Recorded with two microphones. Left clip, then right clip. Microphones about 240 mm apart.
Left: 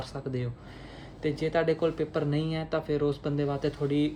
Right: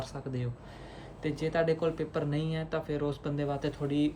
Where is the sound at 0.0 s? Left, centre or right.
Centre.